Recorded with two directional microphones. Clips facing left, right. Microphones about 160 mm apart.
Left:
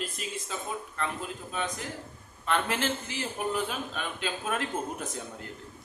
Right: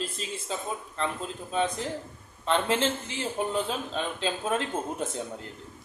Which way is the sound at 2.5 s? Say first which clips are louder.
Right 3 dB; 25° right (ahead or behind).